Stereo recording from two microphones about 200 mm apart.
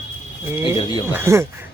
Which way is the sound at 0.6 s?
25° left (ahead or behind).